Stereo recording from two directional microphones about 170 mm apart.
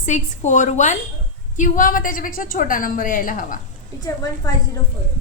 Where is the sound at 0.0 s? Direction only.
45° left (ahead or behind).